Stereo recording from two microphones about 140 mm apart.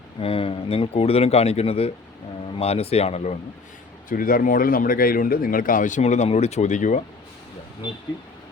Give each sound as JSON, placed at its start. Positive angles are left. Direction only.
{"t": 0.2, "sound": "speech", "side_deg": 40}
{"t": 4.1, "sound": "speech", "side_deg": 90}